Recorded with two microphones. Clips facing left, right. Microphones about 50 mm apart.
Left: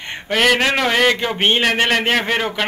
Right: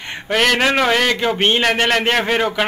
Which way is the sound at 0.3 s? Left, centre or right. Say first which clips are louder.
Even; centre.